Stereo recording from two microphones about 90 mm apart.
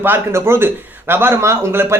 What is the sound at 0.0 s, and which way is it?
Speech, 25° right (ahead or behind).